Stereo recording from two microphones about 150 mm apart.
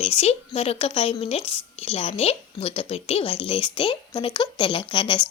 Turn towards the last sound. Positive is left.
turn(degrees=30)  # may be behind; listen again after turning